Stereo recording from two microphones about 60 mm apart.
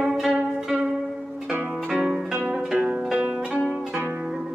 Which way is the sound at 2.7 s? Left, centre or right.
Right.